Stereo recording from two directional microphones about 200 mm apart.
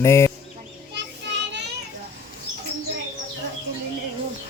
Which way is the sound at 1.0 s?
60° right (ahead or behind).